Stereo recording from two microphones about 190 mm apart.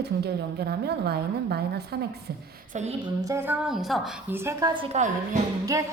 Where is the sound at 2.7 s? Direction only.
35° right (ahead or behind).